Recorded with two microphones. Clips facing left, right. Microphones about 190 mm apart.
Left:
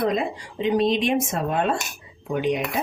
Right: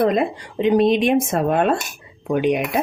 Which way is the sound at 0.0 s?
60° right (ahead or behind).